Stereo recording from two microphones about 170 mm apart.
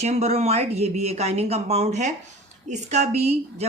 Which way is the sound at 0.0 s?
40° right (ahead or behind).